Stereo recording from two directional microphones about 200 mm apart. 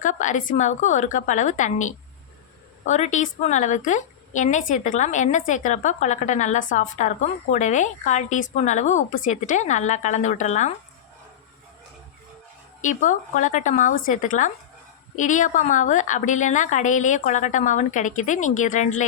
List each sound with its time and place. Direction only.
0.0 s a woman's voice: 40° left (ahead or behind)
12.8 s a woman's voice: 40° left (ahead or behind)